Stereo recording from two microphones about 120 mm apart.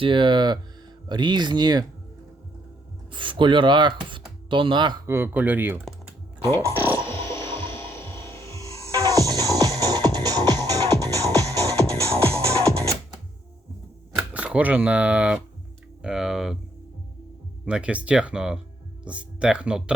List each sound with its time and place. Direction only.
0.0 s speech: 40° right (ahead or behind)
3.1 s speech: 40° right (ahead or behind)
5.0 s speech: 20° right (ahead or behind)
6.7 s music: 15° right (ahead or behind)
7.1 s music: 20° left (ahead or behind)
9.0 s music: 30° right (ahead or behind)
14.3 s speech: 10° right (ahead or behind)
17.7 s speech: 10° right (ahead or behind)